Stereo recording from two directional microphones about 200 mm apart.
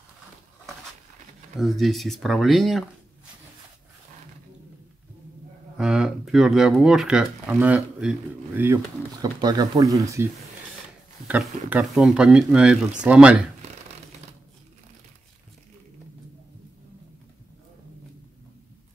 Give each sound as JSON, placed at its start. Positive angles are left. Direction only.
{"t": 1.6, "sound": "speech", "side_deg": 0}
{"t": 5.8, "sound": "speech", "side_deg": -5}
{"t": 9.2, "sound": "speech", "side_deg": -20}
{"t": 11.2, "sound": "speech", "side_deg": -5}